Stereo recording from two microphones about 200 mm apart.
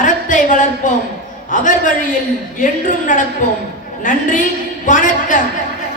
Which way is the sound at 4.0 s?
40° left (ahead or behind).